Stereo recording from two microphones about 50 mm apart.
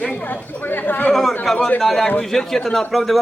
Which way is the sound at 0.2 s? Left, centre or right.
Left.